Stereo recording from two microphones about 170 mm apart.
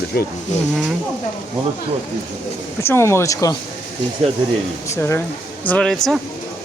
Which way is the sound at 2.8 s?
15° left (ahead or behind).